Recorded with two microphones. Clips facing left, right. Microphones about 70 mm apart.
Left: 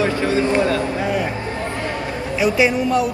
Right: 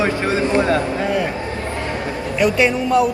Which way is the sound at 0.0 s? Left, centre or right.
Right.